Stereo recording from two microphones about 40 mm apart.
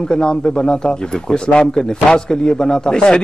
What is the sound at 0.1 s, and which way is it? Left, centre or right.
Speech, left.